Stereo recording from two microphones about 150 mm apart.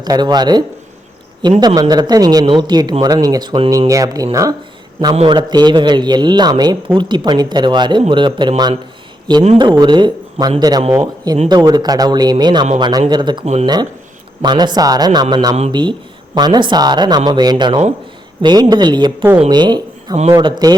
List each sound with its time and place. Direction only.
0.0 s a man's voice: 25° right (ahead or behind)
5.1 s a man's voice: 35° right (ahead or behind)
9.8 s a man's voice: 30° right (ahead or behind)
13.4 s speech: 45° right (ahead or behind)
14.4 s a man's voice: 30° right (ahead or behind)